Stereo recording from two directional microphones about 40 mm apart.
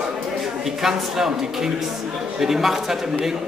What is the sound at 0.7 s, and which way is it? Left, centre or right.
A man's voice, centre.